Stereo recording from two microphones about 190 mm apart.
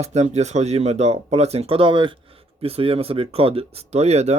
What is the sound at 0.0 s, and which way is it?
Speech, 35° right (ahead or behind).